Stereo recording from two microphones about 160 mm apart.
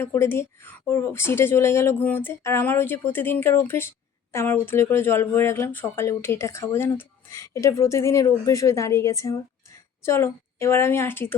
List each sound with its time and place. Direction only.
0.0 s speech: 15° left (ahead or behind)